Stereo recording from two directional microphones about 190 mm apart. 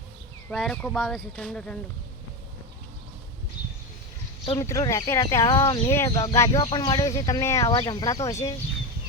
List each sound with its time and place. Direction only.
0.5 s speech: centre (ahead or behind)
4.6 s speech: 15° left (ahead or behind)